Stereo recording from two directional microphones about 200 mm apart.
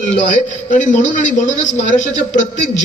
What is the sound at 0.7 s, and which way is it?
A man's voice, 40° left (ahead or behind).